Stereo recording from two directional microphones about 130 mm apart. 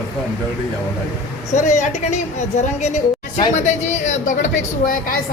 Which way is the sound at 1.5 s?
70° left (ahead or behind).